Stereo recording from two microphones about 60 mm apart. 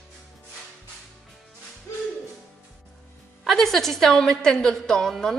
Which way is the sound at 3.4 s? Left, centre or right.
Centre.